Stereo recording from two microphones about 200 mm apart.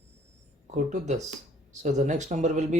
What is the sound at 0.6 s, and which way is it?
Speech, 35° right (ahead or behind).